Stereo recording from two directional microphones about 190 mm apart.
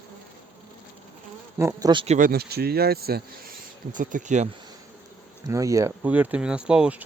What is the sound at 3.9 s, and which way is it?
Speech, 40° right (ahead or behind).